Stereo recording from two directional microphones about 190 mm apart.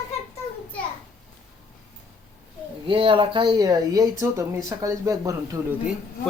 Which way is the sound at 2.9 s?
25° right (ahead or behind).